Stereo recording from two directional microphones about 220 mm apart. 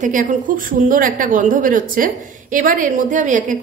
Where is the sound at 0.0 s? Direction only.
35° right (ahead or behind).